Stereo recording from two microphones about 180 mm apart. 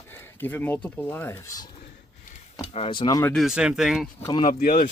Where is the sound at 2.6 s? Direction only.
35° left (ahead or behind).